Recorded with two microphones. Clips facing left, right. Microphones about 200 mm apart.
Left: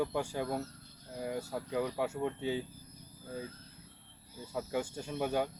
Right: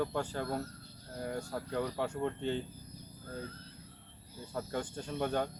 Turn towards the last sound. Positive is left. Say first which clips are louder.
# left 1 dB
turn(degrees=10)  # may be behind; listen again after turning